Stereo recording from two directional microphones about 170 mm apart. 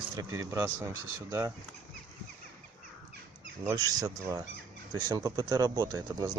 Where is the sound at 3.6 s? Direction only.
20° right (ahead or behind).